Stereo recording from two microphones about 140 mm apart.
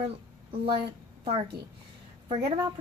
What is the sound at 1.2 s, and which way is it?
Speech, 45° right (ahead or behind).